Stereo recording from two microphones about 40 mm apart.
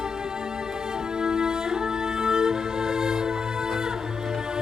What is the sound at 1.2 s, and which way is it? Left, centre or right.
Music, centre.